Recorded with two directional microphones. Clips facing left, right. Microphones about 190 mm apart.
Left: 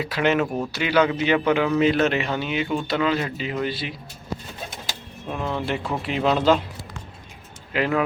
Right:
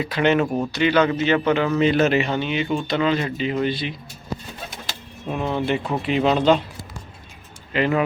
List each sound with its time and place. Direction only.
0.0 s a man's voice: 5° left (ahead or behind)
0.4 s speech: 10° right (ahead or behind)
0.7 s a man's voice: 5° left (ahead or behind)
5.3 s a man's voice: 5° right (ahead or behind)
7.7 s a man's voice: centre (ahead or behind)